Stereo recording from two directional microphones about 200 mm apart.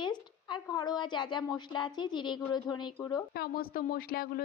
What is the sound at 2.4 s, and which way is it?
Speech, 10° left (ahead or behind).